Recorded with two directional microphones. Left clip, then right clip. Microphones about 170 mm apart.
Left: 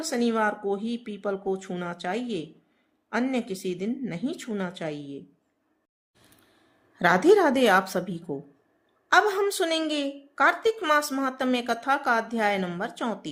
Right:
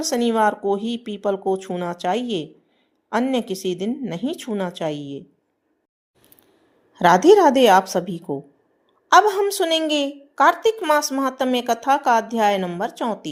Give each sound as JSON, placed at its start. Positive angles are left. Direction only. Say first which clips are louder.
{"t": 0.0, "sound": "speech", "louder": "right 7 dB", "side_deg": -30}
{"t": 6.9, "sound": "a woman's voice", "louder": "right 6 dB", "side_deg": -25}